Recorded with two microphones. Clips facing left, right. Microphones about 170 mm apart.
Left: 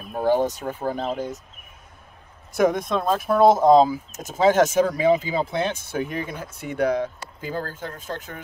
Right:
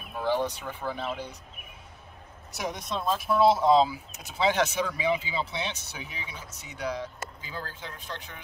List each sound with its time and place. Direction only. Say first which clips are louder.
0.1 s speech: left 7 dB; 45° left (ahead or behind)
2.5 s speech: left 12 dB; 50° left (ahead or behind)